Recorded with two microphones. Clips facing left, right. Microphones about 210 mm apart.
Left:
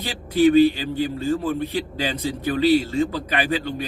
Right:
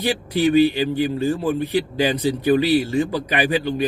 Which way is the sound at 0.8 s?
15° right (ahead or behind).